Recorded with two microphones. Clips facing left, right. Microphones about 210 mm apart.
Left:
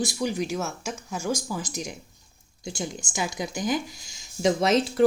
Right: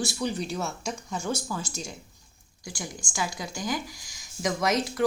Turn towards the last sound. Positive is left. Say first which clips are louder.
# left 5 dB
turn(degrees=30)  # may be behind; listen again after turning